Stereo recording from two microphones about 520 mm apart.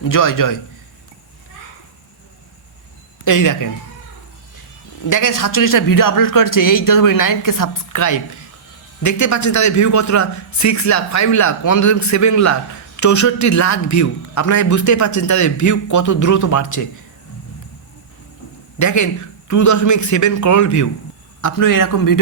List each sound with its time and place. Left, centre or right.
0.0 s a man's voice: left
3.2 s a man's voice: left
5.0 s a man's voice: left
18.8 s a man's voice: left